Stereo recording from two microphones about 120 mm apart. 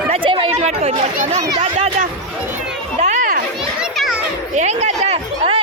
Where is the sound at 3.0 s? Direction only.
75° right (ahead or behind).